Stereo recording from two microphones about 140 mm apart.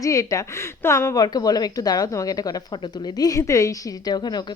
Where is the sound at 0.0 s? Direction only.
25° left (ahead or behind).